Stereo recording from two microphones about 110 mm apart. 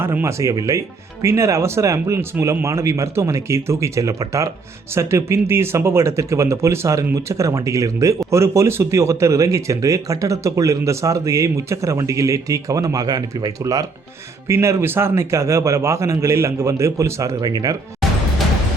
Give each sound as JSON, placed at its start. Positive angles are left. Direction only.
{"t": 0.0, "sound": "speech", "side_deg": -20}